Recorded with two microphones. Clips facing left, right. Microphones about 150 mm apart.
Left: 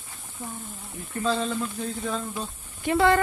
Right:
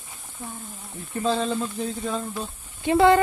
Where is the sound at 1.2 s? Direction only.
25° right (ahead or behind).